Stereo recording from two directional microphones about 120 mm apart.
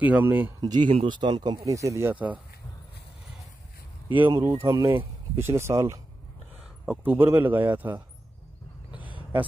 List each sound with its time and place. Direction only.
0.0 s speech: 15° right (ahead or behind)
0.6 s speech: 40° right (ahead or behind); by 2.1 s 25° right (ahead or behind)
2.1 s speech: 10° right (ahead or behind)
4.4 s speech: 25° right (ahead or behind)
6.9 s speech: 10° right (ahead or behind)